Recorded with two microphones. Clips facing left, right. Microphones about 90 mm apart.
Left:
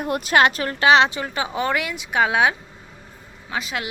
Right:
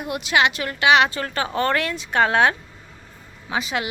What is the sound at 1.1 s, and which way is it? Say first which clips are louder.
A woman's voice: right 1 dB; 15° left (ahead or behind).